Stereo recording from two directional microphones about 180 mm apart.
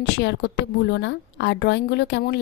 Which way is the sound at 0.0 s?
70° left (ahead or behind).